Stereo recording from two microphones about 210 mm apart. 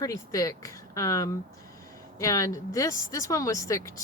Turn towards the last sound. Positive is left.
turn(degrees=15)  # may be behind; listen again after turning